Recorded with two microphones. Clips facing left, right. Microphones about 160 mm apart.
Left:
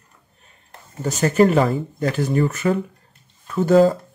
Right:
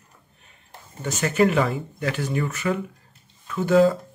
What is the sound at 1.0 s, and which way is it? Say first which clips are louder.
Speech: left 4 dB; 40° left (ahead or behind).